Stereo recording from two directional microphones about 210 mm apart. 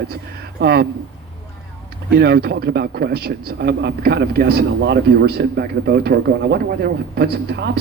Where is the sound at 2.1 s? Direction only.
50° right (ahead or behind).